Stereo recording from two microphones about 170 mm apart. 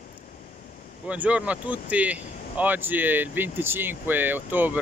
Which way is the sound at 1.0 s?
10° right (ahead or behind).